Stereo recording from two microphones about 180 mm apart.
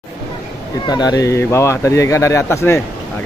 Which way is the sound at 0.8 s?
25° left (ahead or behind).